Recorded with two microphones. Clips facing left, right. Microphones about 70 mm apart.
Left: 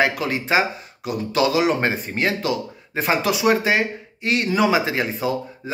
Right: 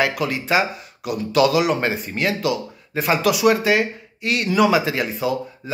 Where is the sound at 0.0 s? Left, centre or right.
Left.